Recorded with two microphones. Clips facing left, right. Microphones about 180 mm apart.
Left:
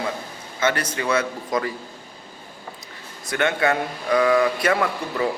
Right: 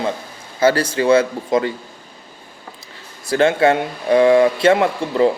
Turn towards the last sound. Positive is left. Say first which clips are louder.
# right 7 dB
turn(degrees=-25)  # may be behind; listen again after turning